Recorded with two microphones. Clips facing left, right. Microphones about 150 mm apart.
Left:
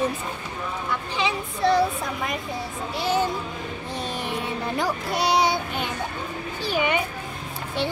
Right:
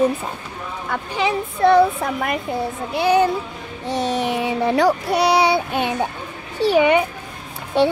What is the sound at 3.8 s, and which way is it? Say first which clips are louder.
Speech: right 11 dB; 75° right (ahead or behind).